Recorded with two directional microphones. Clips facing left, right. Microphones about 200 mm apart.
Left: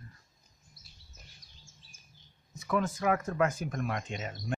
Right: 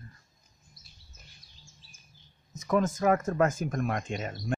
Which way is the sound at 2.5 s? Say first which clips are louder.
Right 4 dB; 40° right (ahead or behind).